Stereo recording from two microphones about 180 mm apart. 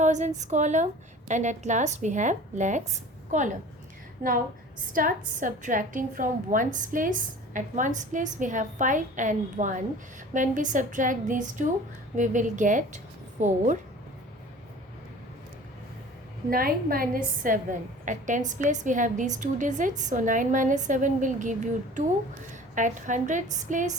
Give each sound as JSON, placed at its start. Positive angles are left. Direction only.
{"t": 0.0, "sound": "a woman's voice", "side_deg": -40}
{"t": 4.9, "sound": "a woman's voice", "side_deg": -50}
{"t": 16.5, "sound": "a woman's voice", "side_deg": -55}
{"t": 22.7, "sound": "a woman's voice", "side_deg": -45}